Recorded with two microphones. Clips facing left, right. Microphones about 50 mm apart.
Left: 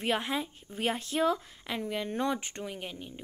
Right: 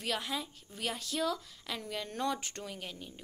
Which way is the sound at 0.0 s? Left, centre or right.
Left.